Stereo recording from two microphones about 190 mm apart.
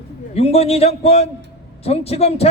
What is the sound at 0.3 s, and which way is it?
A man's voice, 30° left (ahead or behind).